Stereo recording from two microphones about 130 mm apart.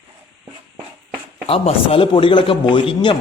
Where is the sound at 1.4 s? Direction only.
50° left (ahead or behind).